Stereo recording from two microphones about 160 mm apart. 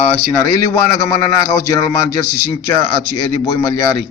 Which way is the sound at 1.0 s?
20° left (ahead or behind).